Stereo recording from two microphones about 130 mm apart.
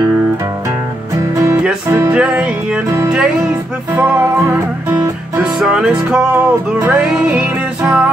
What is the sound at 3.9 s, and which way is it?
Music, 15° right (ahead or behind).